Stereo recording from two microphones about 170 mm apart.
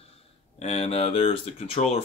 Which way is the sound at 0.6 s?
40° left (ahead or behind).